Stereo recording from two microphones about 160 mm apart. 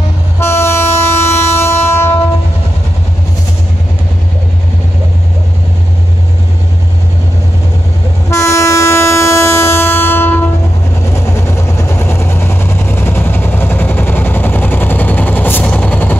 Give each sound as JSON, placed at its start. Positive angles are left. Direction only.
{"t": 0.4, "sound": "train", "side_deg": 15}
{"t": 8.3, "sound": "train", "side_deg": 20}
{"t": 11.1, "sound": "vehicle", "side_deg": 15}